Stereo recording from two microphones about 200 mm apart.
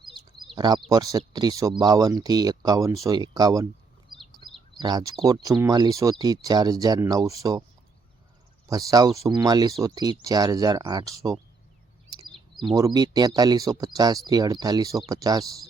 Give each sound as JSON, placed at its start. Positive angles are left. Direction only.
{"t": 0.5, "sound": "speech", "side_deg": -20}
{"t": 4.4, "sound": "bird", "side_deg": -20}
{"t": 4.8, "sound": "speech", "side_deg": -20}
{"t": 8.6, "sound": "speech", "side_deg": -20}
{"t": 12.3, "sound": "bird", "side_deg": 0}
{"t": 12.7, "sound": "speech", "side_deg": -20}